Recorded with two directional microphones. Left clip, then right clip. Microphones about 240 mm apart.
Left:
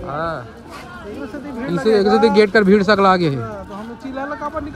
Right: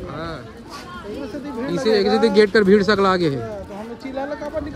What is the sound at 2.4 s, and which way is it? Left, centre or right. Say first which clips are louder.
Speech: left 1 dB; centre.